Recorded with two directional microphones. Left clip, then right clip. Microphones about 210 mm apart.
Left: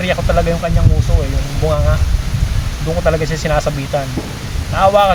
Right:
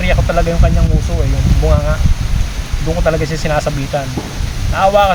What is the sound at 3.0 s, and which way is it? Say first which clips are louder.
Speech: even; centre (ahead or behind).